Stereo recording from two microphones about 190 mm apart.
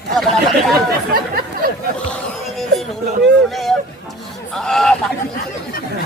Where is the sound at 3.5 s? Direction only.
Centre (ahead or behind).